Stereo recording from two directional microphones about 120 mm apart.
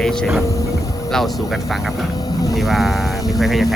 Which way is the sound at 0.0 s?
5° left (ahead or behind).